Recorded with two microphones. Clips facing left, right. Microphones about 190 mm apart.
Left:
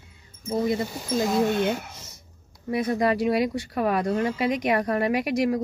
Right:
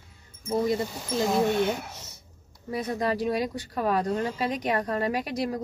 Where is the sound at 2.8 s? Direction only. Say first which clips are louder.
Left 4 dB; 10° left (ahead or behind).